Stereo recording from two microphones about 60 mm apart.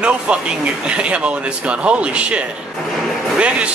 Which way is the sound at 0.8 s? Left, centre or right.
Centre.